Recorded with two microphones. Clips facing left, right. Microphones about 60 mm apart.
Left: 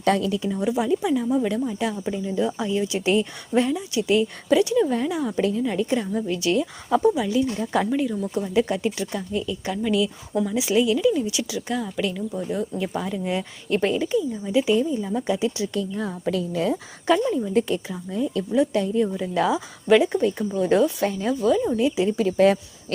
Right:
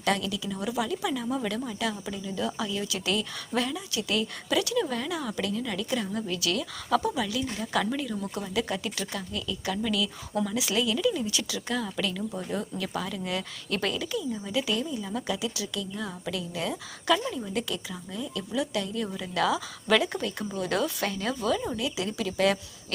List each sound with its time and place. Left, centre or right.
0.0 s a woman's voice: left
0.5 s speech: left
1.2 s speech: centre; by 6.1 s left
6.1 s a woman's voice: centre; by 7.9 s left
7.9 s speech: centre
8.1 s speech: centre
9.0 s speech: centre
12.9 s speech: centre
15.4 s a woman's voice: left
19.1 s speech: left
21.2 s speech: centre
21.8 s a woman's voice: left